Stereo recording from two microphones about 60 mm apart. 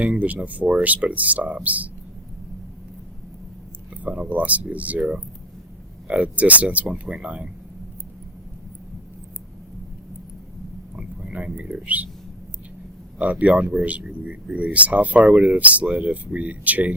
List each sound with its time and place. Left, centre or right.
0.0 s speech: right
4.0 s speech: right
10.9 s a sound: right
13.1 s speech: right